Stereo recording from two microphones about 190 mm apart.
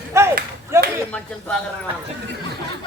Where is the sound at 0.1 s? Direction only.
15° right (ahead or behind).